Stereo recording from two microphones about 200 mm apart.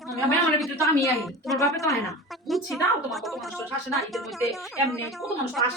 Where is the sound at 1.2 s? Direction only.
Centre (ahead or behind).